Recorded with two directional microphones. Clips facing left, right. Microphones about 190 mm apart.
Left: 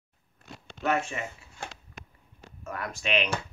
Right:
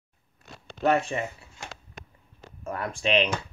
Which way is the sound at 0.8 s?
35° right (ahead or behind).